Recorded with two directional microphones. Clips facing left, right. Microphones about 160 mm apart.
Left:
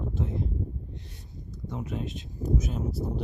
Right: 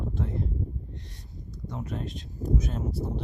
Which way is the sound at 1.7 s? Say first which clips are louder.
Left 1 dB; centre (ahead or behind).